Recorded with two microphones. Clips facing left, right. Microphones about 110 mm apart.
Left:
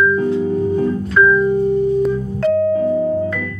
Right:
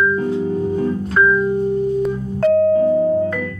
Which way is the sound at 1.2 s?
10° right (ahead or behind).